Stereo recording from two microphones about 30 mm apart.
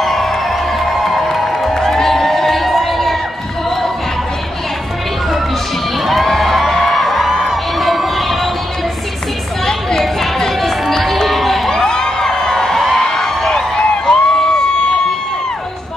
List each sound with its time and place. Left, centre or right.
0.0 s music: centre
1.9 s crowd: centre
6.0 s crowd: centre
6.6 s music: centre
9.7 s chatter: left
10.6 s run: centre
11.2 s music: centre
11.8 s music: left
13.0 s a sound: left